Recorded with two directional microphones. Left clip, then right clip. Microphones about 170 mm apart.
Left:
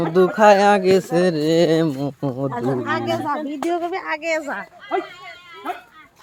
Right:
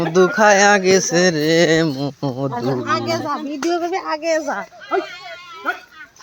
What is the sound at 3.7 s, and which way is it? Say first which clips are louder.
Speech: right 3 dB; 80° right.